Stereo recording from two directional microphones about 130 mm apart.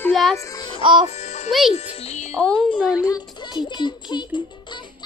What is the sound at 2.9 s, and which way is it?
Speech, 30° left (ahead or behind).